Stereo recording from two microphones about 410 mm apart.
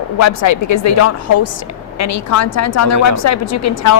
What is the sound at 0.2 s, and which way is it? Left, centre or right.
A woman's voice, left.